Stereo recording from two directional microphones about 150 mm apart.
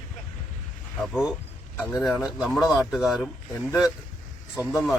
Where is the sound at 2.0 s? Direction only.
Centre (ahead or behind).